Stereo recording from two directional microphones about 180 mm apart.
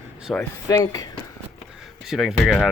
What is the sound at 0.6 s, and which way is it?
Speech, 20° left (ahead or behind).